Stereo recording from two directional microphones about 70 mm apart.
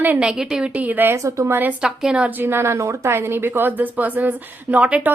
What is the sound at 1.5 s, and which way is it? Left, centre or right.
Speech, right.